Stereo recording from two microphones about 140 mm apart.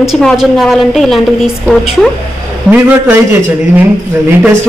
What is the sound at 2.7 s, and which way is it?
Speech, 15° right (ahead or behind).